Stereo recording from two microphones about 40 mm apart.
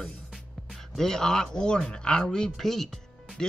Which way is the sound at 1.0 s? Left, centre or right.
Centre.